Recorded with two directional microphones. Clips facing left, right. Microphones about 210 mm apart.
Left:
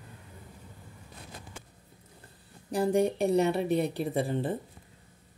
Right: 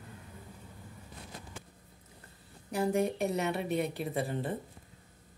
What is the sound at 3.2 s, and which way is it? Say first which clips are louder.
A woman's voice: left 6 dB; 30° left (ahead or behind).